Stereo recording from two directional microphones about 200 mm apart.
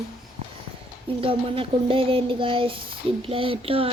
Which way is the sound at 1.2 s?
25° right (ahead or behind).